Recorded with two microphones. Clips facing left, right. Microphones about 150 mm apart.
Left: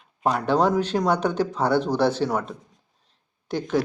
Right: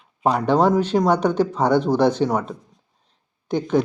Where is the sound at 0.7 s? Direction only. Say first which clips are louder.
Right 4 dB; 10° right (ahead or behind).